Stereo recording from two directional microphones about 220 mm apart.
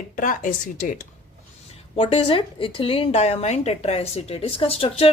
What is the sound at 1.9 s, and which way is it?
A woman's voice, 25° left (ahead or behind).